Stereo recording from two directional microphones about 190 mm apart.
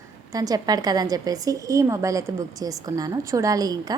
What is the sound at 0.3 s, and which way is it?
A woman's voice, 20° right (ahead or behind).